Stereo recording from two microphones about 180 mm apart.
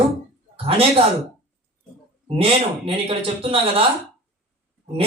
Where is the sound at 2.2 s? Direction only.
30° right (ahead or behind).